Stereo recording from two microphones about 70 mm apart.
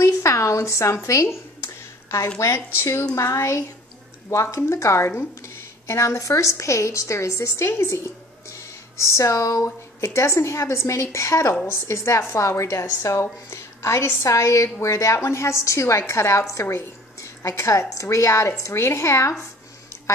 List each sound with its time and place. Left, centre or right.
0.0 s speech: left
1.6 s a sound: left
2.3 s a woman's voice: left